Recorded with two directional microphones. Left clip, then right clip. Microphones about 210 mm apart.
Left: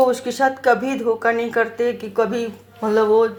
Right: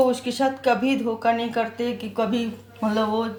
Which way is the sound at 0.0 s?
25° left (ahead or behind).